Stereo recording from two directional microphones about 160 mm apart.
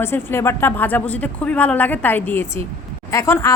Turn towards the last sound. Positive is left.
turn(degrees=15)  # may be behind; listen again after turning